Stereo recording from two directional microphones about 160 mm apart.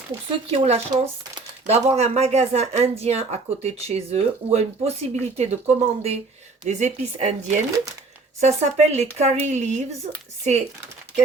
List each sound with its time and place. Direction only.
0.3 s speech: 40° right (ahead or behind)